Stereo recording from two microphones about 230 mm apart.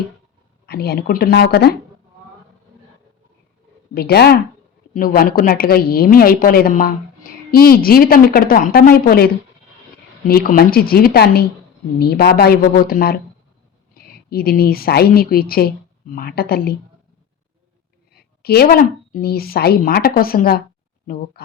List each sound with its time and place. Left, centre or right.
0.7 s speech: left
3.9 s a woman's voice: left
14.3 s a woman's voice: left
18.1 s a woman's voice: left